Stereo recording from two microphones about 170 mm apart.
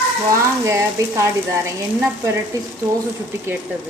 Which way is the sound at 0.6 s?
15° right (ahead or behind).